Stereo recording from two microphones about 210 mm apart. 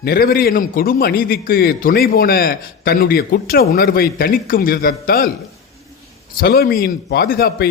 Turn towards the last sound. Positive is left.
turn(degrees=45)  # may be behind; listen again after turning